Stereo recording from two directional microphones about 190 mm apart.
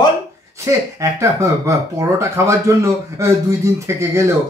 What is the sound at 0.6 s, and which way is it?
Speech, 15° right (ahead or behind).